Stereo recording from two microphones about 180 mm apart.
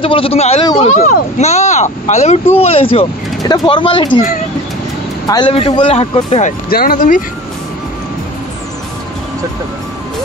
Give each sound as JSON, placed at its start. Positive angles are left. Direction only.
{"t": 0.0, "sound": "speech", "side_deg": 30}
{"t": 5.3, "sound": "speech", "side_deg": 30}
{"t": 6.7, "sound": "speech", "side_deg": 55}